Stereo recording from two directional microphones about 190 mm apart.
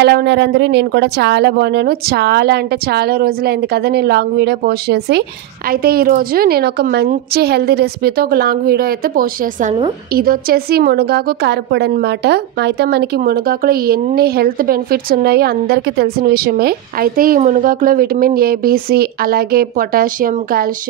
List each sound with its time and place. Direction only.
0.0 s a woman's voice: 60° right (ahead or behind)